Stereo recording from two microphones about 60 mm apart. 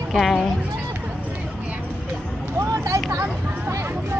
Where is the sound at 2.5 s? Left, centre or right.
Right.